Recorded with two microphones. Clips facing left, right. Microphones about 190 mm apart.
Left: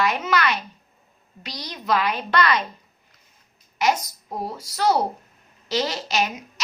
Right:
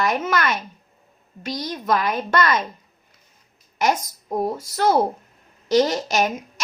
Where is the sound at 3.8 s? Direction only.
50° right (ahead or behind).